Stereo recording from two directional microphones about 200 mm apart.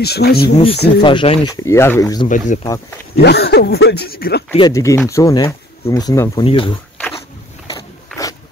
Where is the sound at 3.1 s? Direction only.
55° left (ahead or behind).